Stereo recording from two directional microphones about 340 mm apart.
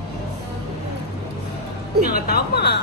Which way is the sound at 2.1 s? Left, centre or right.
Left.